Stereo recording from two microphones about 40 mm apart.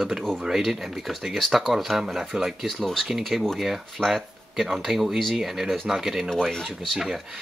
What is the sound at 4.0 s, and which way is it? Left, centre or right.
Speech, centre.